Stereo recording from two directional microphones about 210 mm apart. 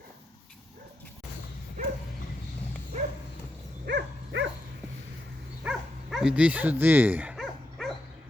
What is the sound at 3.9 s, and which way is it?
Dog, 60° right (ahead or behind).